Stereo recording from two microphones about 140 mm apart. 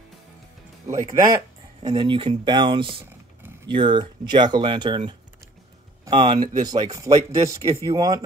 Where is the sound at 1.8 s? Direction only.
40° right (ahead or behind).